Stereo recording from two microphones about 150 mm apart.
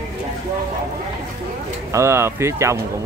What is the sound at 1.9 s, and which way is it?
Speech, 15° right (ahead or behind).